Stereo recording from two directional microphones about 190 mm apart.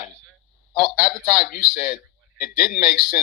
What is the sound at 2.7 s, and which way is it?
Speech, centre (ahead or behind).